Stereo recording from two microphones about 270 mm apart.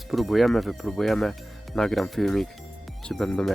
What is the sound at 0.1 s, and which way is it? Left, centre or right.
Speech, centre.